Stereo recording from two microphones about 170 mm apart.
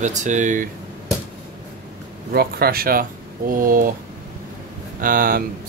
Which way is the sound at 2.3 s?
65° right (ahead or behind).